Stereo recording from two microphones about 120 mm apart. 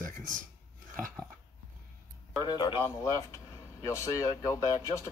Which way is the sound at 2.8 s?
25° left (ahead or behind).